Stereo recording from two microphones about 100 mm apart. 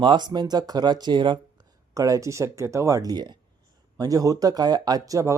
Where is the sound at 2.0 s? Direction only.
35° right (ahead or behind).